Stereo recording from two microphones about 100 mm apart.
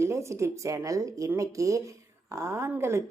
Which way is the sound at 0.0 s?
30° right (ahead or behind).